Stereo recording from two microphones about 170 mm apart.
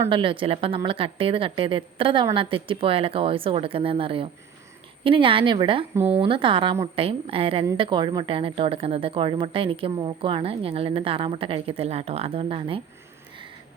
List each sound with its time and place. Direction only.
0.1 s a woman's voice: 30° right (ahead or behind)
5.9 s a woman's voice: 15° right (ahead or behind)
6.1 s a woman's voice: 30° right (ahead or behind)